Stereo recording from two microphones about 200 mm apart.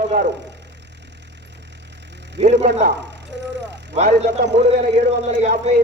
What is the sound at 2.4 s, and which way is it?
Speech, 30° right (ahead or behind).